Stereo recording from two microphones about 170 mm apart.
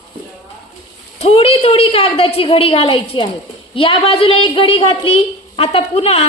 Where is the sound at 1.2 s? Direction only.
35° left (ahead or behind).